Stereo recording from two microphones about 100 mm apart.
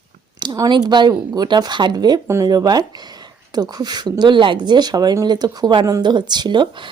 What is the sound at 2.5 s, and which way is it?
Speech, 40° right (ahead or behind).